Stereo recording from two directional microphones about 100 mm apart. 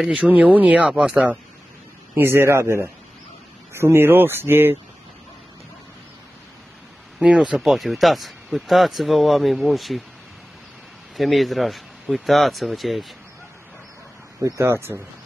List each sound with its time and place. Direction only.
0.0 s speech: 10° right (ahead or behind)
2.1 s speech: 25° right (ahead or behind)
7.2 s speech: 10° right (ahead or behind)
11.1 s speech: centre (ahead or behind)
14.4 s speech: 25° right (ahead or behind)